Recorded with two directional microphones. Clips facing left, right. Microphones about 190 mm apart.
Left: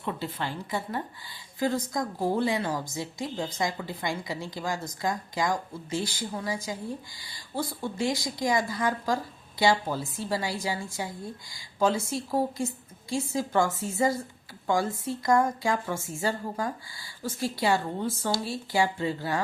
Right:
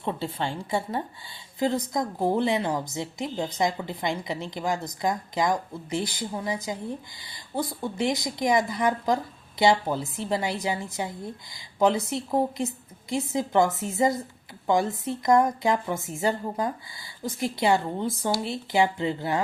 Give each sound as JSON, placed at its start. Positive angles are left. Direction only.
{"t": 0.0, "sound": "a woman's voice", "side_deg": -30}